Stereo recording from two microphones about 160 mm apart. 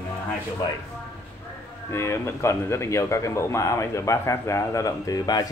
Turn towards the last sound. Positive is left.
turn(degrees=25)  # may be behind; listen again after turning